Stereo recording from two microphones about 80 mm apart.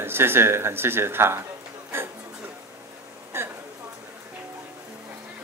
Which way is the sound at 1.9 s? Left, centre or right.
Right.